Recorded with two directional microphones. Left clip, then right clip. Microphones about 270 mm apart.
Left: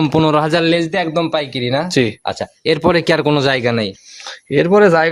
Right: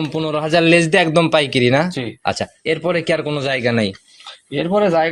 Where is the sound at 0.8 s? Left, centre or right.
Right.